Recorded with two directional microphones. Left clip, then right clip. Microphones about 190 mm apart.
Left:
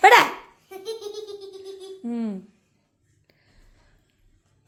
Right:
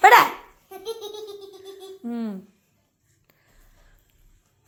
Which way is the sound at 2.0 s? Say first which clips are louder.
Left 1 dB; 15° left (ahead or behind).